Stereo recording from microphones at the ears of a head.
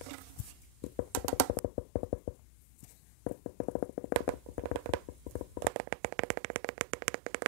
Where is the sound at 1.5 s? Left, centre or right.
Left.